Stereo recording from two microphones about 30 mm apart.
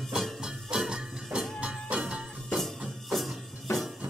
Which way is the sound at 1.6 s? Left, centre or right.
Right.